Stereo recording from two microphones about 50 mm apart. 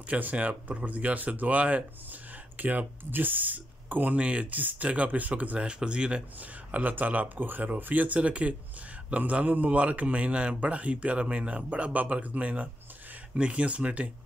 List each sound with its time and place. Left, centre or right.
0.1 s a man's voice: right
6.4 s a man's voice: right